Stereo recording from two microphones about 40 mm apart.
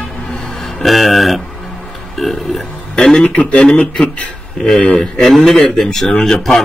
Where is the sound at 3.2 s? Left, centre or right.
Left.